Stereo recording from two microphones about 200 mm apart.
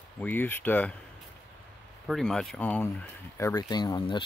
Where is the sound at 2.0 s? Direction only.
Centre (ahead or behind).